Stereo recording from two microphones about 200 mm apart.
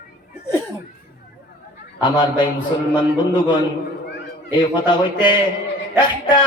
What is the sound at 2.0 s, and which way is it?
A man's voice, 25° left (ahead or behind).